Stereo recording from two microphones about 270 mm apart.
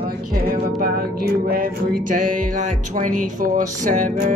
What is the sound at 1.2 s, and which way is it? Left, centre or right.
Music, right.